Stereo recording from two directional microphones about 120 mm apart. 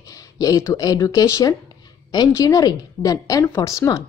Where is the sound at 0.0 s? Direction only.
30° left (ahead or behind).